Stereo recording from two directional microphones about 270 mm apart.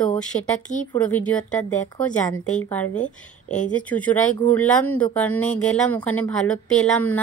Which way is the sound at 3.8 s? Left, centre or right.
Centre.